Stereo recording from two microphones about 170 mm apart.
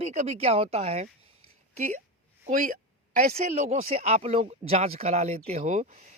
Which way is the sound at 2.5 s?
50° right (ahead or behind).